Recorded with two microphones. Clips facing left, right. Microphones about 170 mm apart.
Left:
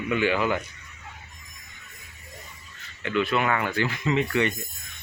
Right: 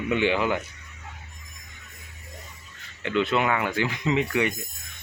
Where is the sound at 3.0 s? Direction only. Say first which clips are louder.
Right 1 dB; 20° right (ahead or behind).